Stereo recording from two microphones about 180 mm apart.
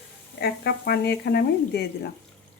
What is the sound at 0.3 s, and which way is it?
Speech, 65° left (ahead or behind).